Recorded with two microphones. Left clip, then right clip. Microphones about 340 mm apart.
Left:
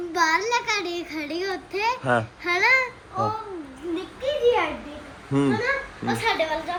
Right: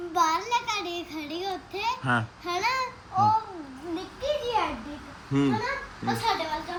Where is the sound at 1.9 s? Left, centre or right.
Centre.